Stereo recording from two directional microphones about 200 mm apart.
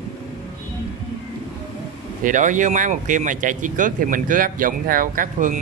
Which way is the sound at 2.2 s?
40° right (ahead or behind).